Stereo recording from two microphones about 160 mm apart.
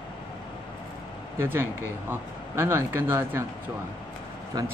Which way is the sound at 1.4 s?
15° right (ahead or behind).